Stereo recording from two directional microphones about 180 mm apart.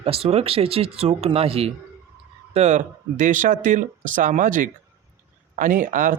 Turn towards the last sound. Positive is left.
turn(degrees=-45)  # may be behind; listen again after turning